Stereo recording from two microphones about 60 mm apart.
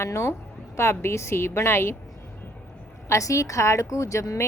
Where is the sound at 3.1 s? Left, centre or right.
Left.